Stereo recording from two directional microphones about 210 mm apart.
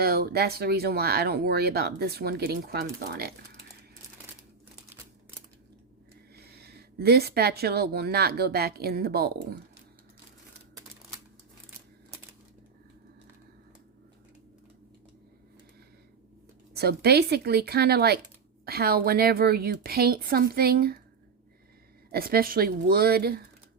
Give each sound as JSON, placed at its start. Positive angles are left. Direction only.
{"t": 0.0, "sound": "speech", "side_deg": -50}
{"t": 6.3, "sound": "a woman's voice", "side_deg": -50}
{"t": 16.7, "sound": "speech", "side_deg": -50}
{"t": 22.1, "sound": "speech", "side_deg": -45}